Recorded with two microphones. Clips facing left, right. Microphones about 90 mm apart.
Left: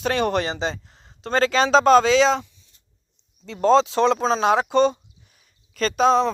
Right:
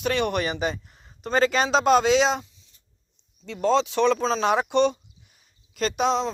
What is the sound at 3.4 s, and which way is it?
Speech, 40° left (ahead or behind).